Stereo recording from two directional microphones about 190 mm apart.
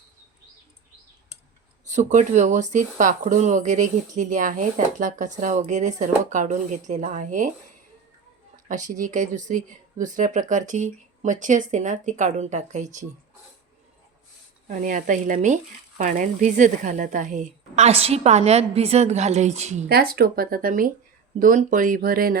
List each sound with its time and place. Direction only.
1.9 s speech: 40° right (ahead or behind)
8.6 s speech: 40° right (ahead or behind)
14.7 s speech: 45° right (ahead or behind)
19.9 s speech: 55° right (ahead or behind)